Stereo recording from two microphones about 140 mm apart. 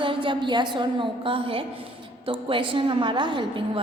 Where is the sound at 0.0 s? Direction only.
35° right (ahead or behind).